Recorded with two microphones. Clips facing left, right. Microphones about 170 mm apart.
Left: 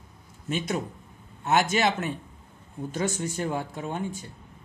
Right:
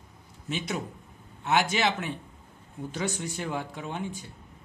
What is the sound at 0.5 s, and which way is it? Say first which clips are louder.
Speech: left 3 dB; 45° left (ahead or behind).